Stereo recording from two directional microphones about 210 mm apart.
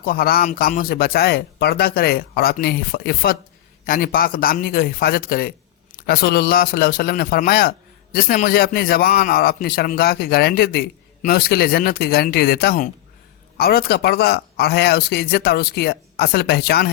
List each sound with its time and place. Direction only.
0.0 s a man's voice: 45° left (ahead or behind)